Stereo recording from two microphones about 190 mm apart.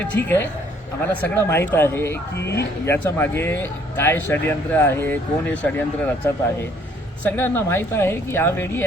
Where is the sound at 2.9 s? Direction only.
10° left (ahead or behind).